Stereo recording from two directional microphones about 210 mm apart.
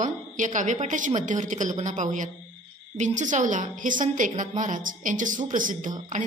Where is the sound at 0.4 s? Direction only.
35° right (ahead or behind).